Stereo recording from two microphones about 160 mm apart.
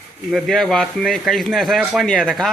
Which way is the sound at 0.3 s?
Centre (ahead or behind).